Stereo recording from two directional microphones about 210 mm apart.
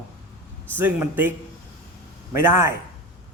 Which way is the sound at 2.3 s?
10° right (ahead or behind).